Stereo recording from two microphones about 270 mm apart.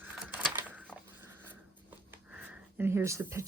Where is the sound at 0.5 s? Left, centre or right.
Centre.